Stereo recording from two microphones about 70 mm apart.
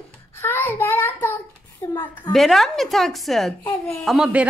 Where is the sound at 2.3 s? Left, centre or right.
Centre.